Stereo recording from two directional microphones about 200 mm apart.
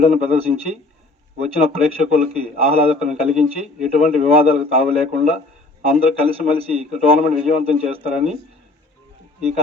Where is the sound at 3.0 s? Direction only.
Centre (ahead or behind).